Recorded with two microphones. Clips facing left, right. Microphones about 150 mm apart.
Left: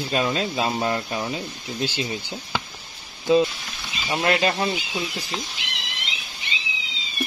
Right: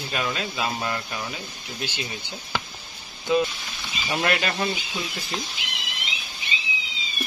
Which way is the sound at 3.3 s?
25° left (ahead or behind).